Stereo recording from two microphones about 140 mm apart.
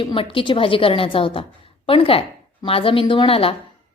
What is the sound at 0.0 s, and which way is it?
A woman's voice, 40° left (ahead or behind).